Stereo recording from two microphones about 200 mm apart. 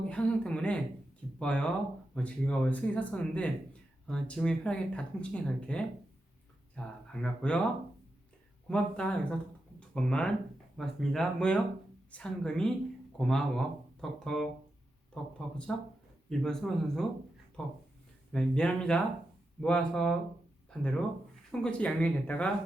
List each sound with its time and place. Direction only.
0.0 s speech: 5° left (ahead or behind)
8.6 s speech: 5° left (ahead or behind)
21.5 s speech: 5° left (ahead or behind)